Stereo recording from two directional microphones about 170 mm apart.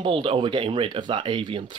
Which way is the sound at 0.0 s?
30° right (ahead or behind).